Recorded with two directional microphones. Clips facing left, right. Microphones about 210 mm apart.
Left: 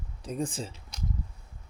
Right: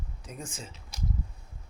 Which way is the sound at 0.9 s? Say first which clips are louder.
Right 2 dB; 5° right (ahead or behind).